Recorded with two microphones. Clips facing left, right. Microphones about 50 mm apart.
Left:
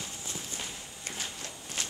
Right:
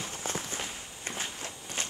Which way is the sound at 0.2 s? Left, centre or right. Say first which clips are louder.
Right 5 dB; right.